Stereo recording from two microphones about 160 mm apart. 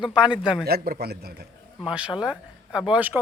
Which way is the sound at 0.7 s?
75° right (ahead or behind).